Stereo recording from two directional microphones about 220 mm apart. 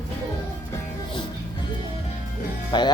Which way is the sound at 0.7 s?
20° left (ahead or behind).